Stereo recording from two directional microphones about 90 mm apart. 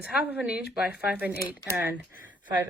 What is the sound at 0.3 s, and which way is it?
Speech, 15° right (ahead or behind).